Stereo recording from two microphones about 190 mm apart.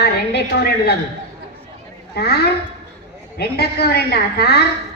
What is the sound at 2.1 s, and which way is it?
A woman's voice, 55° left (ahead or behind).